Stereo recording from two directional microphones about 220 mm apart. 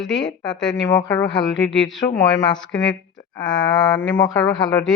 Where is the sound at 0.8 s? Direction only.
15° left (ahead or behind).